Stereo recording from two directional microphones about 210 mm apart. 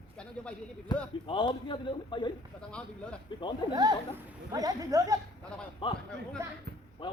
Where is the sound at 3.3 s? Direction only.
20° left (ahead or behind).